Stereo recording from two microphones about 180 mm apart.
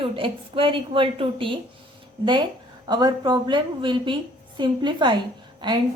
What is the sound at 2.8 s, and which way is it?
A woman's voice, 20° right (ahead or behind).